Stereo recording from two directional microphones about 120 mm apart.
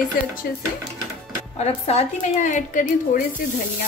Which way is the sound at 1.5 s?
60° left (ahead or behind).